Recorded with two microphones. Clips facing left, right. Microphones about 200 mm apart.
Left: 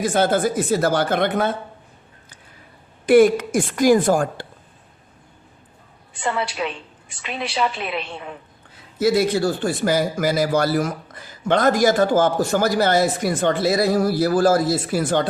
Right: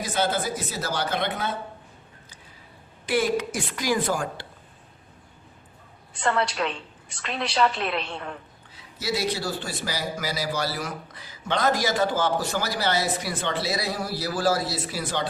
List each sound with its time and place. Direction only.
0.0 s a man's voice: 50° left (ahead or behind)
3.1 s a man's voice: 55° left (ahead or behind)
6.1 s a woman's voice: 5° left (ahead or behind)
9.0 s a man's voice: 50° left (ahead or behind)